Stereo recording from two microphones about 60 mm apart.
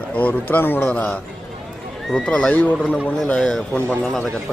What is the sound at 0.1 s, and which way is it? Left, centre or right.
Speech, left.